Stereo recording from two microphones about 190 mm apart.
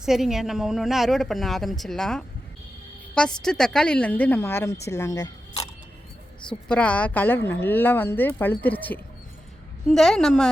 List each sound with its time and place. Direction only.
0.0 s a woman's voice: centre (ahead or behind); by 5.6 s 20° left (ahead or behind)
6.7 s a woman's voice: 5° left (ahead or behind)